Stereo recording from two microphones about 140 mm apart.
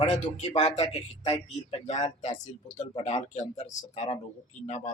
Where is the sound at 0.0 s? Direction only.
55° left (ahead or behind).